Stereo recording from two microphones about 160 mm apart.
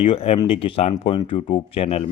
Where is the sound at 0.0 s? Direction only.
40° left (ahead or behind).